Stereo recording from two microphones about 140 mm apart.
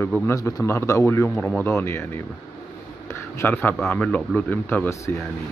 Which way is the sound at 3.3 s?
15° left (ahead or behind).